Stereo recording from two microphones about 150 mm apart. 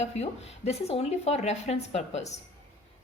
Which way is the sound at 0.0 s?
45° left (ahead or behind).